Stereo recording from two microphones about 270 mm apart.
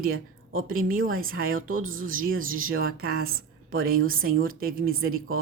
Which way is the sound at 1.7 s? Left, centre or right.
Right.